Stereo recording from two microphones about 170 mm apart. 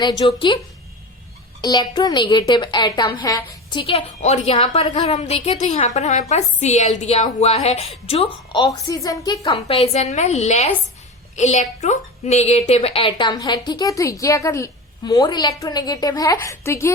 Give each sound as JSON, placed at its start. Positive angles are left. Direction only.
{"t": 0.0, "sound": "a woman's voice", "side_deg": 25}
{"t": 1.6, "sound": "a woman's voice", "side_deg": 25}
{"t": 8.5, "sound": "a woman's voice", "side_deg": 20}